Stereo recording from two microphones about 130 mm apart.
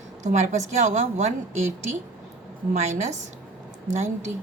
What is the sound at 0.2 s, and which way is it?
A woman's voice, 70° right (ahead or behind).